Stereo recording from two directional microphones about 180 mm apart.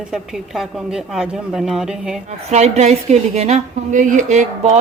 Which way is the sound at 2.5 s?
40° right (ahead or behind).